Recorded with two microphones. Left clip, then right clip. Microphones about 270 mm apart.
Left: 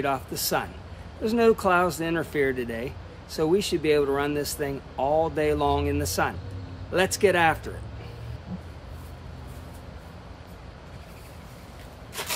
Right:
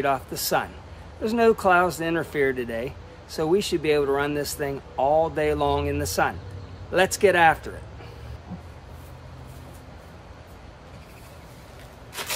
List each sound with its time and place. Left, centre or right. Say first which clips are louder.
0.0 s speech: right 3 dB; centre